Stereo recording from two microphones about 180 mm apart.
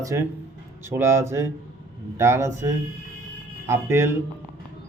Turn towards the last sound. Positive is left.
turn(degrees=-15)  # may be behind; listen again after turning